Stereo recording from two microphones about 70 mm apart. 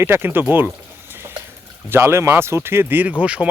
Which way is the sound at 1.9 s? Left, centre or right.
Right.